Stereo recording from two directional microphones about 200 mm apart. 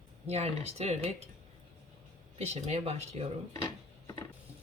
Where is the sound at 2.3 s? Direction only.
30° right (ahead or behind).